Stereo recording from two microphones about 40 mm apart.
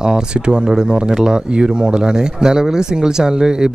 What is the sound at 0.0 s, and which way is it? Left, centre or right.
Speech, centre.